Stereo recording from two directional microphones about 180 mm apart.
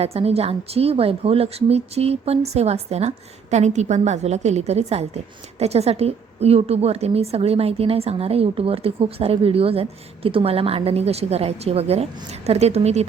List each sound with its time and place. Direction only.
0.0 s a woman's voice: 35° right (ahead or behind)